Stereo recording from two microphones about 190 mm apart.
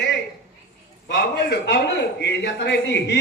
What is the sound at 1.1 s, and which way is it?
A man's voice, 65° left (ahead or behind).